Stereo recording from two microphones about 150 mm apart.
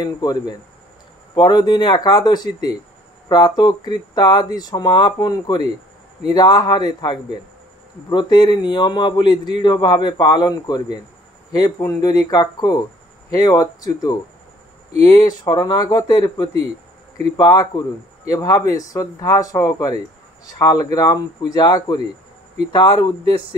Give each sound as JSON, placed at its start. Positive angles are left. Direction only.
{"t": 0.0, "sound": "a man's voice", "side_deg": 25}